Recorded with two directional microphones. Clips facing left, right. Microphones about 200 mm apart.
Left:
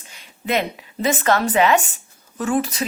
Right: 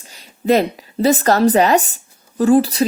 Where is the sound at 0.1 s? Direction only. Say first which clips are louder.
Right 8 dB; 35° right (ahead or behind).